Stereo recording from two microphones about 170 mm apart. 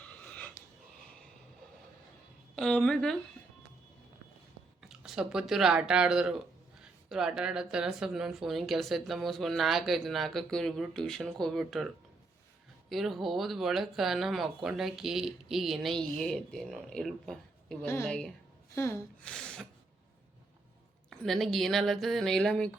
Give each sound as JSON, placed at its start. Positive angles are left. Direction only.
{"t": 0.0, "sound": "dog", "side_deg": 10}
{"t": 2.6, "sound": "speech", "side_deg": 5}
{"t": 4.9, "sound": "speech", "side_deg": -5}
{"t": 12.9, "sound": "speech", "side_deg": 0}
{"t": 17.8, "sound": "a woman's voice", "side_deg": 10}
{"t": 19.2, "sound": "speech", "side_deg": 5}
{"t": 21.1, "sound": "speech", "side_deg": 0}